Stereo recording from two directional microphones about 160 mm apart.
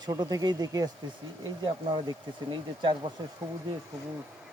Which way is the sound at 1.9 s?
30° right (ahead or behind).